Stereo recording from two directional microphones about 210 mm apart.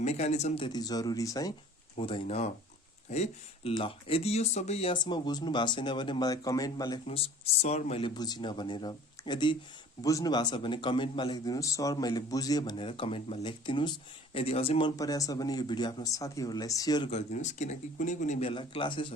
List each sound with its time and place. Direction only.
0.0 s speech: 30° left (ahead or behind)
7.6 s speech: 30° left (ahead or behind)
17.1 s speech: 30° left (ahead or behind)